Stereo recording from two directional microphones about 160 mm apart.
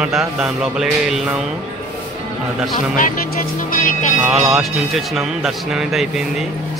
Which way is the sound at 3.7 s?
55° left (ahead or behind).